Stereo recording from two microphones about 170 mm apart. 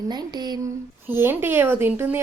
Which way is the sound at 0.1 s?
25° right (ahead or behind).